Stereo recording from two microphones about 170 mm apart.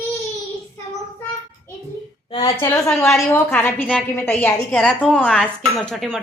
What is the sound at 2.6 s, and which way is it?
A woman's voice, 15° left (ahead or behind).